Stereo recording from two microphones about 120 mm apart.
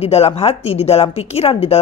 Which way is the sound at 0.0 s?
60° left (ahead or behind).